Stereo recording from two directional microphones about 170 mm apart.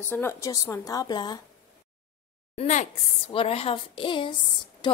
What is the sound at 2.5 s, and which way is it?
A woman's voice, 45° left (ahead or behind).